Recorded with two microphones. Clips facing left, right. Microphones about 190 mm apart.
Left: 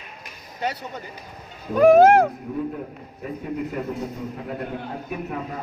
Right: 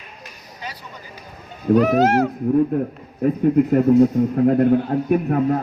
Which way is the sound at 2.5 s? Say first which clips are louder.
Right 12 dB; 50° right (ahead or behind).